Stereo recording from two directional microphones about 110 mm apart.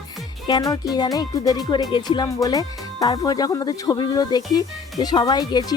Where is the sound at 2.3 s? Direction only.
35° left (ahead or behind).